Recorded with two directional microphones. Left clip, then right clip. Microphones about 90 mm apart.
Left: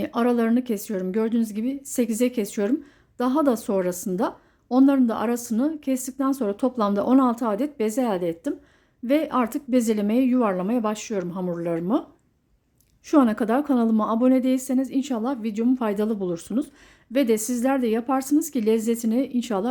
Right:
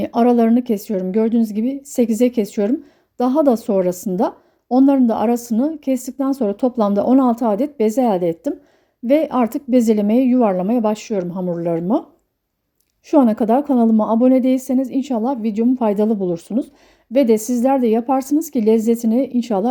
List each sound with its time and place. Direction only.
0.0 s a woman's voice: 35° right (ahead or behind)
13.1 s a woman's voice: 20° right (ahead or behind)